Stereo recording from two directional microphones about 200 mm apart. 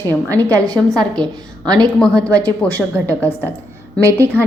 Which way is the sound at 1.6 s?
20° right (ahead or behind).